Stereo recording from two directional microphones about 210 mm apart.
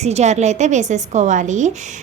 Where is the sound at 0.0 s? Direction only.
30° right (ahead or behind).